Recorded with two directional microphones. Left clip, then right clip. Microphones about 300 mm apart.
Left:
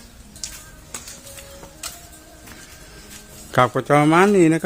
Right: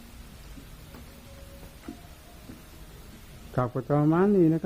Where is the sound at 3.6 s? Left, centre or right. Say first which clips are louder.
Left 11 dB; left.